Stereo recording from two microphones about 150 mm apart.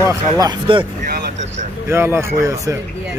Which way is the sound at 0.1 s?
25° right (ahead or behind).